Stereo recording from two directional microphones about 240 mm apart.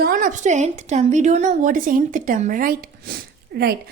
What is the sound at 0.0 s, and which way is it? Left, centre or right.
A woman's voice, right.